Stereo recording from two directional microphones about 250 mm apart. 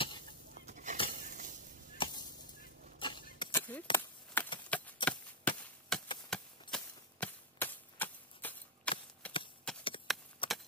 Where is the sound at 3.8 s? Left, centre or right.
Centre.